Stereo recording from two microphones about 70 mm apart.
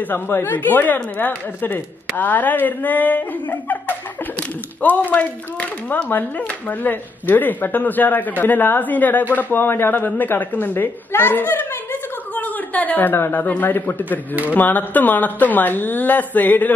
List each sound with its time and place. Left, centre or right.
0.1 s a woman's voice: left